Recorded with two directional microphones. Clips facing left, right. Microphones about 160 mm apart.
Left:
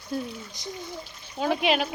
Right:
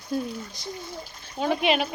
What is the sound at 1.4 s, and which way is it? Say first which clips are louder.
Speech: right 1 dB; centre (ahead or behind).